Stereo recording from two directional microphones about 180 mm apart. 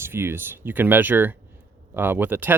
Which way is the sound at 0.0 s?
15° right (ahead or behind).